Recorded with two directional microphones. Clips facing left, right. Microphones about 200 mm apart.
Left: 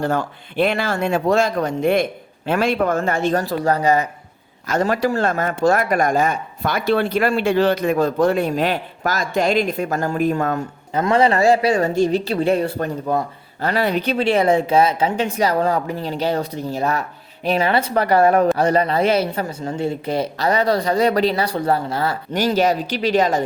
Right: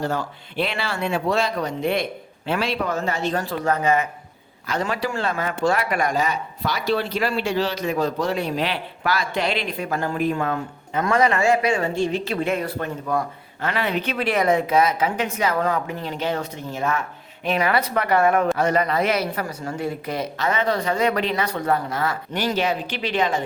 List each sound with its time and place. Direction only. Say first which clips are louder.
0.0 s speech: left 4 dB; 50° left (ahead or behind)
11.0 s speech: left 4 dB; 30° left (ahead or behind)